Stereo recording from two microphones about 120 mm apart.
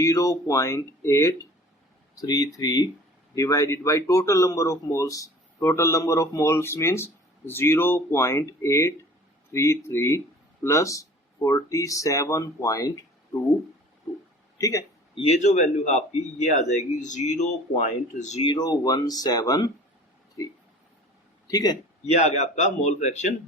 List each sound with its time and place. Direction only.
0.0 s speech: 25° left (ahead or behind)
14.6 s a man's voice: 30° left (ahead or behind)
15.1 s a man's voice: 55° left (ahead or behind)
15.4 s speech: 75° left (ahead or behind)
16.6 s speech: 90° left
17.7 s speech: 75° left (ahead or behind)
18.4 s speech: 35° left (ahead or behind)
21.4 s a man's voice: 30° left (ahead or behind)
22.2 s speech: 80° left